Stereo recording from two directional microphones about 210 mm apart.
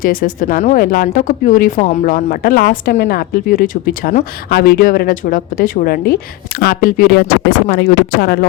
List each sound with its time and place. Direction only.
0.0 s speech: 40° left (ahead or behind)